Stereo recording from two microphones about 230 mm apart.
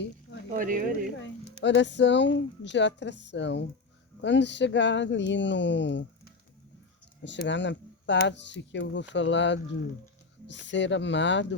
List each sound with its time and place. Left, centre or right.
0.5 s speech: right
1.6 s a woman's voice: left
7.3 s a woman's voice: left